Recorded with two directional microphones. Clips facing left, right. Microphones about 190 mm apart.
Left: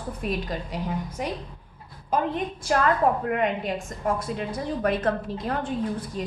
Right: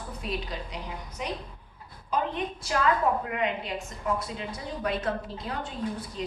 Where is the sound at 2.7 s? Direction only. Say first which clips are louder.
Left 4 dB; 50° left (ahead or behind).